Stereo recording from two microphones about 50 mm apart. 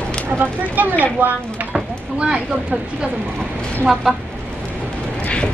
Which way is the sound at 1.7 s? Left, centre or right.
Centre.